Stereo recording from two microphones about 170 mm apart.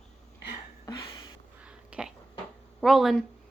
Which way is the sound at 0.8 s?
20° left (ahead or behind).